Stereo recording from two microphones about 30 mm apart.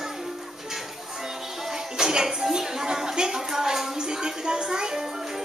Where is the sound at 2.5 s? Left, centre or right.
Centre.